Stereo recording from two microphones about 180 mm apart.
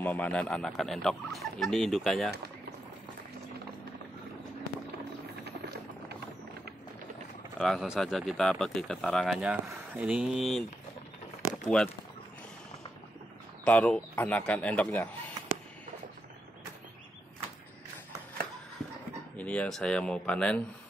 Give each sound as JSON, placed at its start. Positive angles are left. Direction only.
{"t": 0.0, "sound": "speech", "side_deg": 10}
{"t": 5.4, "sound": "a sound", "side_deg": -65}
{"t": 7.5, "sound": "speech", "side_deg": 0}
{"t": 11.6, "sound": "speech", "side_deg": 0}
{"t": 13.7, "sound": "speech", "side_deg": 5}
{"t": 19.3, "sound": "speech", "side_deg": 5}